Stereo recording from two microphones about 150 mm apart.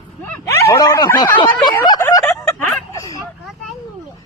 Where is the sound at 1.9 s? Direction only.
25° left (ahead or behind).